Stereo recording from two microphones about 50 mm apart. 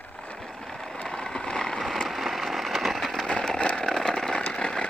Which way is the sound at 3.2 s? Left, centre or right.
Centre.